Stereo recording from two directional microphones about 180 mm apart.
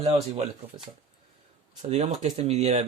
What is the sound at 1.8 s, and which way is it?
Speech, 35° right (ahead or behind).